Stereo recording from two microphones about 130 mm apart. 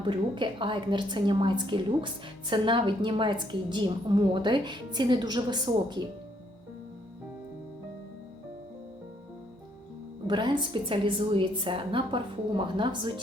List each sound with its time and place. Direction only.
0.0 s a woman's voice: 40° right (ahead or behind)
10.2 s a woman's voice: 35° right (ahead or behind)